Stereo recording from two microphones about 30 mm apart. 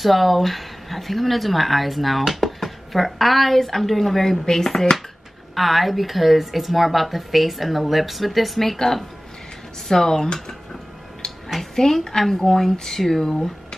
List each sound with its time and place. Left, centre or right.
0.0 s a woman's voice: centre
5.5 s a woman's voice: centre
11.7 s a woman's voice: centre